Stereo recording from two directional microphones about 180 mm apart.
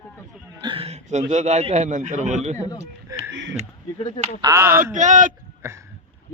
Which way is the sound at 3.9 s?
30° left (ahead or behind).